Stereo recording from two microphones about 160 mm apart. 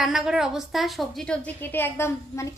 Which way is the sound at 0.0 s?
5° right (ahead or behind).